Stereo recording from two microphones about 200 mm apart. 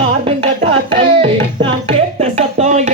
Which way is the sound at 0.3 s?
30° right (ahead or behind).